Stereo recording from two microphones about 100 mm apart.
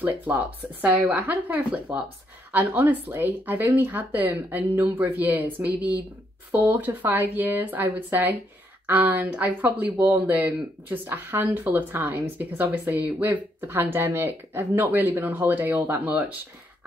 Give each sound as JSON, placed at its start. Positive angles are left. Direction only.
{"t": 0.0, "sound": "speech", "side_deg": -15}